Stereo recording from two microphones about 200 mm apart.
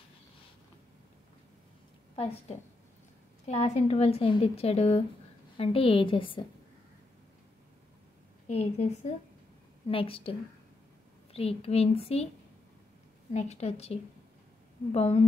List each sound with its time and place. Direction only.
2.1 s speech: 30° left (ahead or behind)
8.5 s a woman's voice: 35° left (ahead or behind)
11.3 s speech: 30° left (ahead or behind)
13.3 s a woman's voice: 35° left (ahead or behind)